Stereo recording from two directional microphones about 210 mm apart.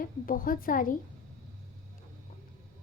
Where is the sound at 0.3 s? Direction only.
40° left (ahead or behind).